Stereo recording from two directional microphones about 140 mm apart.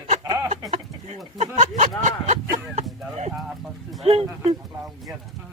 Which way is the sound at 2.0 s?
60° right (ahead or behind).